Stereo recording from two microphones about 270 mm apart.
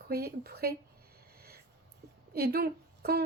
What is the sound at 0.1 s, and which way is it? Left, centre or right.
Speech, right.